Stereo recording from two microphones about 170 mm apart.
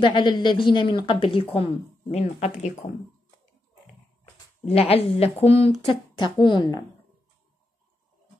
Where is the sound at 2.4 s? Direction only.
45° left (ahead or behind).